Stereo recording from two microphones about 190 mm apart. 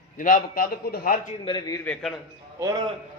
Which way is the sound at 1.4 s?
25° left (ahead or behind).